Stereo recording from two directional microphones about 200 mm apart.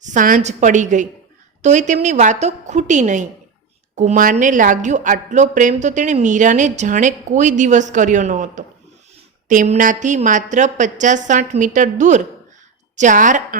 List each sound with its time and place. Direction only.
0.0 s speech: 40° right (ahead or behind)